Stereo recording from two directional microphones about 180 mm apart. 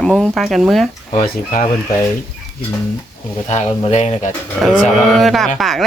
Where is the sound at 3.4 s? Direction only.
40° left (ahead or behind).